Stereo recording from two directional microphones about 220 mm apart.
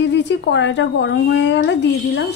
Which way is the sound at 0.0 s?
55° left (ahead or behind).